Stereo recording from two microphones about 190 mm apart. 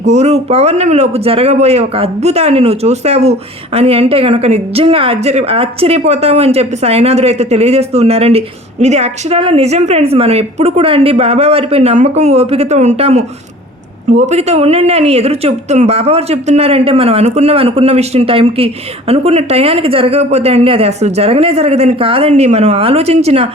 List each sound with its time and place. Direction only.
0.1 s speech: 35° right (ahead or behind)